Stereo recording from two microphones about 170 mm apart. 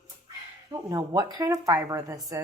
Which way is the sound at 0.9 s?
20° right (ahead or behind).